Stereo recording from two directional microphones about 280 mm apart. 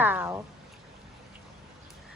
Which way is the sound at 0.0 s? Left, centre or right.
Centre.